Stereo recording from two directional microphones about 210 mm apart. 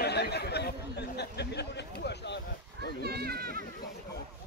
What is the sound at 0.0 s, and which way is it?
Chatter, 50° left (ahead or behind).